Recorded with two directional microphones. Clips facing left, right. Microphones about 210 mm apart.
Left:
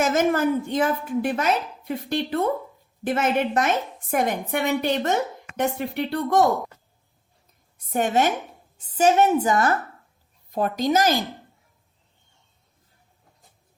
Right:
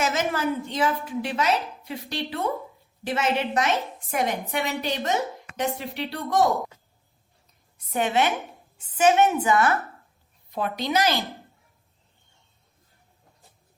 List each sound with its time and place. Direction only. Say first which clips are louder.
0.0 s a woman's voice: left 5 dB; 50° left (ahead or behind)
7.9 s a woman's voice: left 2 dB; 45° left (ahead or behind)